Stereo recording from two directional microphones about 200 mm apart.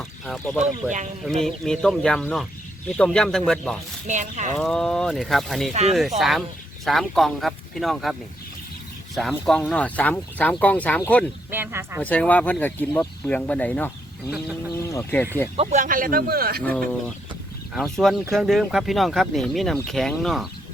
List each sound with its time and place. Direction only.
0.3 s speech: 5° left (ahead or behind)
0.6 s speech: 35° right (ahead or behind)
1.5 s speech: 5° left (ahead or behind)
4.0 s speech: 35° right (ahead or behind)
4.5 s speech: 5° left (ahead or behind)
9.3 s speech: 5° left (ahead or behind)
11.5 s speech: 10° right (ahead or behind)
12.0 s speech: 5° left (ahead or behind)
15.5 s speech: 35° right (ahead or behind); by 16.6 s 50° right (ahead or behind)
16.6 s speech: 10° left (ahead or behind)